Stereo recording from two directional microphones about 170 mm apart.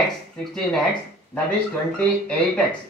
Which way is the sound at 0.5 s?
Centre (ahead or behind).